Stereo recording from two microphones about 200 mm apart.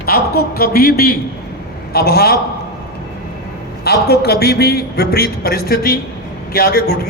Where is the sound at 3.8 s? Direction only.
55° left (ahead or behind).